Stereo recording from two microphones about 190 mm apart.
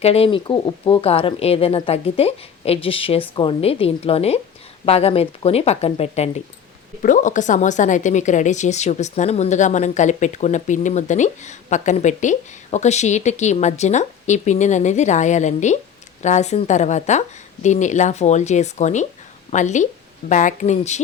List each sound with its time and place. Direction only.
0.0 s a woman's voice: 30° left (ahead or behind)